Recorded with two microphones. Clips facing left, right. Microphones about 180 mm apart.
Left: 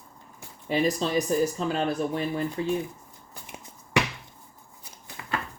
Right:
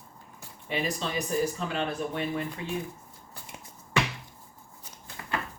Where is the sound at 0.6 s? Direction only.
35° left (ahead or behind).